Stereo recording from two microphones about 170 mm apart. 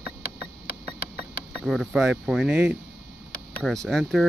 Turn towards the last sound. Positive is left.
turn(degrees=0)  # may be behind; listen again after turning